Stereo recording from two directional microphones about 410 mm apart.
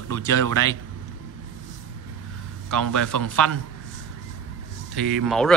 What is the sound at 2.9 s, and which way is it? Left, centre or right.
Speech, centre.